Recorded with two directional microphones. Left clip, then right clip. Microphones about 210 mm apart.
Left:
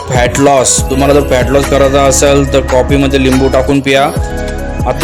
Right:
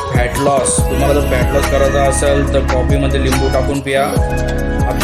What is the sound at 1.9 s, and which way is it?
Music, 40° left (ahead or behind).